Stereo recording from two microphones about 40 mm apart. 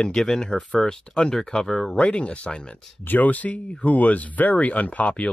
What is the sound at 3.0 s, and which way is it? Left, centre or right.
Speech, left.